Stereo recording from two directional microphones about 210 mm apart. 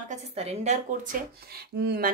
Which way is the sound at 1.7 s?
50° right (ahead or behind).